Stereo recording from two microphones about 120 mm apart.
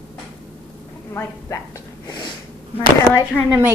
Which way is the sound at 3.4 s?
15° left (ahead or behind).